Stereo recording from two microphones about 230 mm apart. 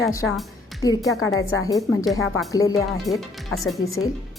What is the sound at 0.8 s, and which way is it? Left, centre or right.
Speech, centre.